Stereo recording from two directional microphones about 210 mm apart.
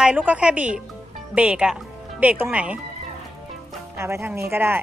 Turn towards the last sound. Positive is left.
turn(degrees=-10)  # may be behind; listen again after turning